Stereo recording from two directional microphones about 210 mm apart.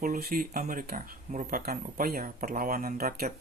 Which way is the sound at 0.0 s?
45° right (ahead or behind).